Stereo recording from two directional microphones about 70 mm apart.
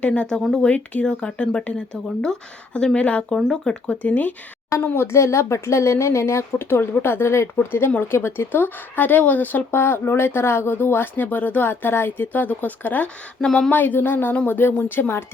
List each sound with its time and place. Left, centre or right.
0.0 s speech: centre
4.8 s a woman's voice: left
13.4 s speech: centre
13.7 s a woman's voice: left